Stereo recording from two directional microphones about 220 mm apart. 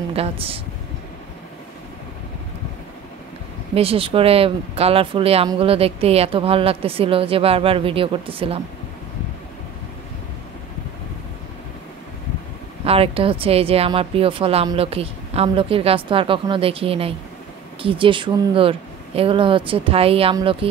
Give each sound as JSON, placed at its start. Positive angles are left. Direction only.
{"t": 0.1, "sound": "speech", "side_deg": -25}
{"t": 3.7, "sound": "speech", "side_deg": -25}
{"t": 12.8, "sound": "speech", "side_deg": -25}